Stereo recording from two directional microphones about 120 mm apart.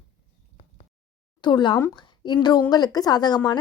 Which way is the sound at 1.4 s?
40° left (ahead or behind).